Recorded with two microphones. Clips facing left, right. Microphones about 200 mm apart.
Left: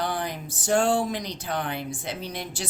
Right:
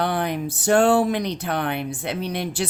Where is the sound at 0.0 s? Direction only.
65° right (ahead or behind).